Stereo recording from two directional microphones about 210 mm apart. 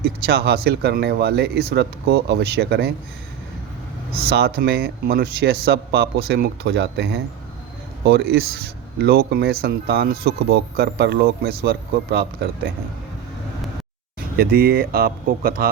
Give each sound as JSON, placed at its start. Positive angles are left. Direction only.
{"t": 0.0, "sound": "speech", "side_deg": -50}
{"t": 4.1, "sound": "speech", "side_deg": -50}
{"t": 14.3, "sound": "speech", "side_deg": -45}